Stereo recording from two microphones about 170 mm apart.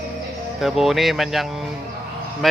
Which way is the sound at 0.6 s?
Centre (ahead or behind).